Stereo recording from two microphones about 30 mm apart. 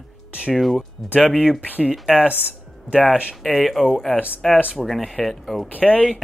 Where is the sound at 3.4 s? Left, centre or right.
Centre.